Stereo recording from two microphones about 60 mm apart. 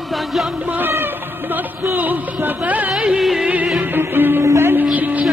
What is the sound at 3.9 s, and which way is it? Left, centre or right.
Music, right.